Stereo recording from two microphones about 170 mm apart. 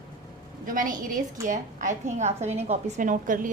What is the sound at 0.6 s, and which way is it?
A woman's voice, 55° right (ahead or behind).